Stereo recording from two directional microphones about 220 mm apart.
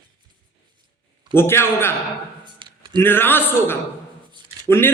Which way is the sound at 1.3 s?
10° left (ahead or behind).